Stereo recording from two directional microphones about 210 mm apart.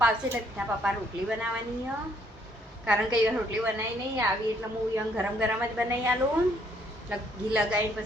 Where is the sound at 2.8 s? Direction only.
5° right (ahead or behind).